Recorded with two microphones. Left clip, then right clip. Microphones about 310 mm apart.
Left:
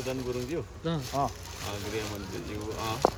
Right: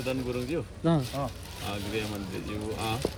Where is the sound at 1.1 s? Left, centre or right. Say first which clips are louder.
Left 4 dB; centre.